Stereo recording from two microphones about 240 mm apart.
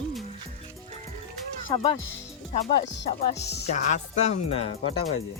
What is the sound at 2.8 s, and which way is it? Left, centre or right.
Music, left.